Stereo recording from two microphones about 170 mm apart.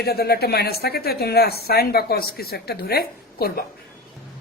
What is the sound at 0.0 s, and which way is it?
Speech, 70° left (ahead or behind).